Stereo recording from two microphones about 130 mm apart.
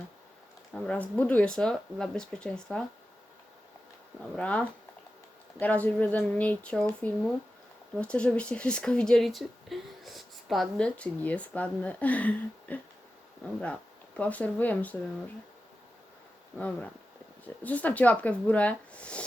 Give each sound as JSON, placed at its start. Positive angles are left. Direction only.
{"t": 0.7, "sound": "speech", "side_deg": 10}
{"t": 4.2, "sound": "speech", "side_deg": 10}
{"t": 16.6, "sound": "speech", "side_deg": 10}